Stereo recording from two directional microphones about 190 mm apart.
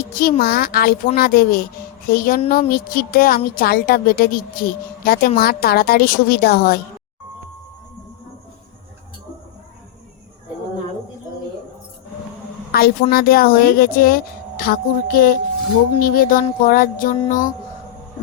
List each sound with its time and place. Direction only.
0.2 s speech: 50° left (ahead or behind)
12.7 s speech: 50° left (ahead or behind)